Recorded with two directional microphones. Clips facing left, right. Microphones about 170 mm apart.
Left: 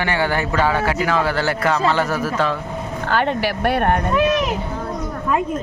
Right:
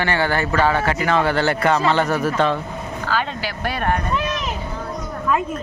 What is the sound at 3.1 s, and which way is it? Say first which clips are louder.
Speech: left 6 dB; 60° left (ahead or behind).